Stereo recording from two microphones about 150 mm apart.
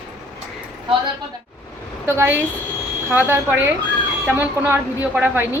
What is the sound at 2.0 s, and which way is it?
A woman's voice, 15° right (ahead or behind).